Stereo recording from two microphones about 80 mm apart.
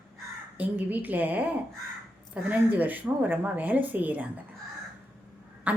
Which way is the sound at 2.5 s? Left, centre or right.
Centre.